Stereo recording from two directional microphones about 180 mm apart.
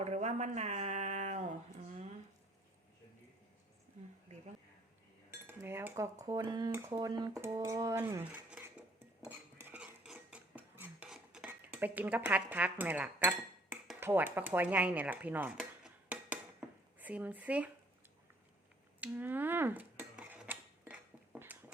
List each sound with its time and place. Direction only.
0.0 s a sound: 40° right (ahead or behind)
5.5 s cutlery: 10° right (ahead or behind)
6.2 s speech: 20° right (ahead or behind)
6.9 s cutlery: 25° right (ahead or behind)
15.5 s dishes: 5° right (ahead or behind)
18.9 s dishes: 10° right (ahead or behind)